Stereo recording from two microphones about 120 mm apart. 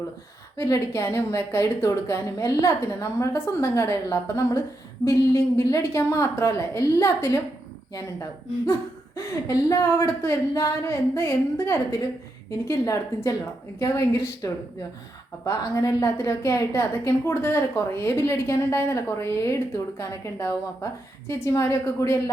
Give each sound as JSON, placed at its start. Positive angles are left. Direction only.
{"t": 0.5, "sound": "a woman's voice", "side_deg": 20}